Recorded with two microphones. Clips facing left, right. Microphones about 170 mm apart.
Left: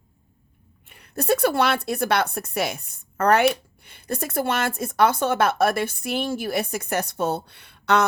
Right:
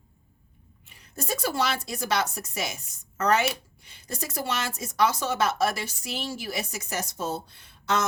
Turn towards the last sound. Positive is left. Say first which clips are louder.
# left 6 dB
turn(degrees=65)  # may be behind; listen again after turning